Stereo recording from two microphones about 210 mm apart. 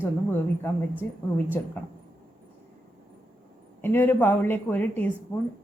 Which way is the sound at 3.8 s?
10° left (ahead or behind).